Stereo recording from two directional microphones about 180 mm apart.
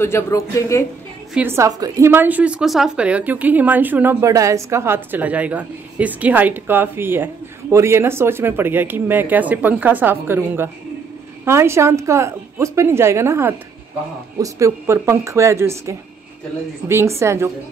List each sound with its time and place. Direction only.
0.0 s speech: 15° left (ahead or behind)
1.3 s a woman's voice: 10° right (ahead or behind)